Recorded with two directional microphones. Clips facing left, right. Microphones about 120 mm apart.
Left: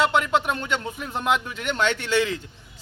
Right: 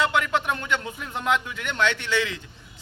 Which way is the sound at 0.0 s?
15° left (ahead or behind).